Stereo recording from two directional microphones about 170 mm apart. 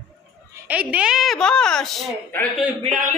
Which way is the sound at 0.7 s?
10° right (ahead or behind).